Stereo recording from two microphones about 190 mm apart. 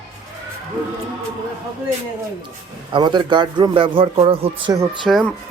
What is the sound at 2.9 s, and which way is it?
A man's voice, 25° right (ahead or behind).